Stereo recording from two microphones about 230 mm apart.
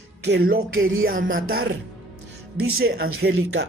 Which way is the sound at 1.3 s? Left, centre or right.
Right.